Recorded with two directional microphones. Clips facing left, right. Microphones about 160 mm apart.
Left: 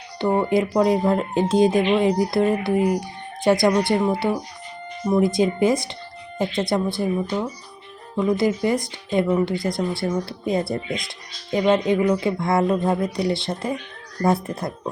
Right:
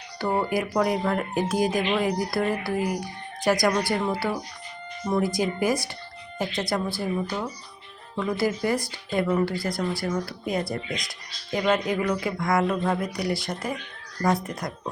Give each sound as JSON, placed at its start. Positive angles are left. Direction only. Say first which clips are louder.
{"t": 0.2, "sound": "speech", "louder": "left 5 dB", "side_deg": 20}